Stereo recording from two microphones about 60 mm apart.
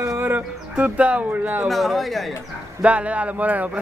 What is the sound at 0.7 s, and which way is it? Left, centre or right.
Speech, right.